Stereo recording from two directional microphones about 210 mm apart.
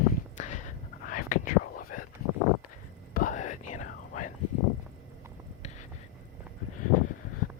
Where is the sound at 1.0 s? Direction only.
40° left (ahead or behind).